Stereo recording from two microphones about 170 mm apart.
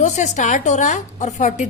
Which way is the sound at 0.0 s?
45° left (ahead or behind).